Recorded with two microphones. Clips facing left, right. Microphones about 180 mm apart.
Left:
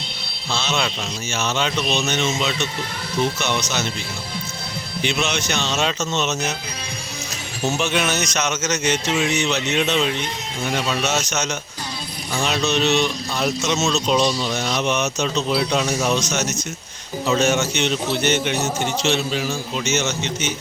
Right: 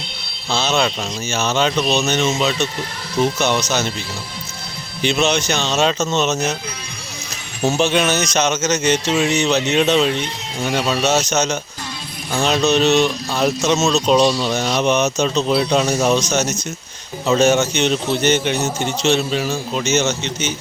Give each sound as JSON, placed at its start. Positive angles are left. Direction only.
{"t": 0.5, "sound": "a sound", "side_deg": -40}
{"t": 1.3, "sound": "speech", "side_deg": -35}
{"t": 5.0, "sound": "speech", "side_deg": -35}
{"t": 7.8, "sound": "speech", "side_deg": -30}
{"t": 19.7, "sound": "speech", "side_deg": -35}